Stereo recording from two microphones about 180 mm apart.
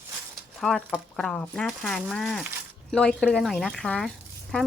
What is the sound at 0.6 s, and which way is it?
Speech, 5° left (ahead or behind).